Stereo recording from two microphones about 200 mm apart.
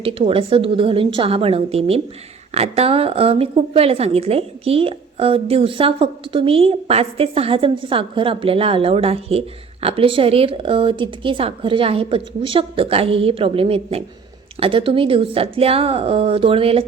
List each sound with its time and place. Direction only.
0.0 s a woman's voice: 25° right (ahead or behind)